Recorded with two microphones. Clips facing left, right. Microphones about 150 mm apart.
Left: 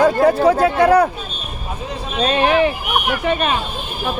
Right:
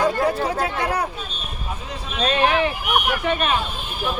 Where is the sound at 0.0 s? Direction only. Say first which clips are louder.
Left 7 dB; 60° left (ahead or behind).